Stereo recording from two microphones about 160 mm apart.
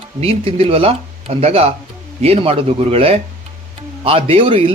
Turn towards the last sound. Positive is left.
turn(degrees=-35)  # may be behind; listen again after turning